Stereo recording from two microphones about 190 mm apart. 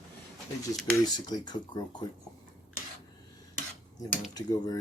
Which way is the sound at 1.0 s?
20° left (ahead or behind).